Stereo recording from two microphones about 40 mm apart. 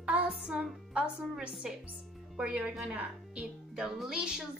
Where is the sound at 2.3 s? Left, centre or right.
Right.